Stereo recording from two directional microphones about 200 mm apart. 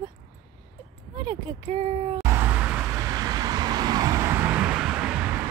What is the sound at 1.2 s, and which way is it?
Speech, 25° right (ahead or behind).